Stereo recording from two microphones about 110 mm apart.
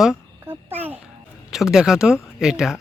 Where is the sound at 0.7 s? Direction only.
15° right (ahead or behind).